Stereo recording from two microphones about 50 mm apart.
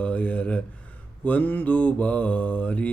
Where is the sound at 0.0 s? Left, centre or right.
Left.